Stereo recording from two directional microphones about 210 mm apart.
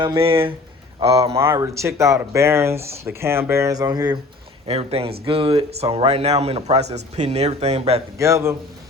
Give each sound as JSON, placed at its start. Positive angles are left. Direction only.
{"t": 0.0, "sound": "speech", "side_deg": -25}
{"t": 1.4, "sound": "speech", "side_deg": -15}
{"t": 4.6, "sound": "speech", "side_deg": -30}
{"t": 8.2, "sound": "speech", "side_deg": -15}